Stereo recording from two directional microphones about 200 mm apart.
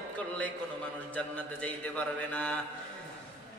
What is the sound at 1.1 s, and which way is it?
Mantra, 5° left (ahead or behind).